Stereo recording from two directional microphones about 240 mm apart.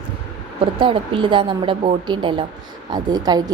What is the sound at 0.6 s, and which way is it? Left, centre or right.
A woman's voice, right.